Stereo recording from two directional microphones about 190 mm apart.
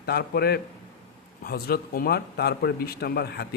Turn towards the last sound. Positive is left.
turn(degrees=55)  # may be behind; listen again after turning